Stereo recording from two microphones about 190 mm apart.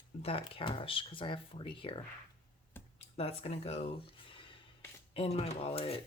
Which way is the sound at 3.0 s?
30° left (ahead or behind).